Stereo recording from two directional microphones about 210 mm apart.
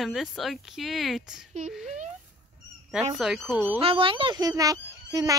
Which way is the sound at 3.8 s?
25° right (ahead or behind).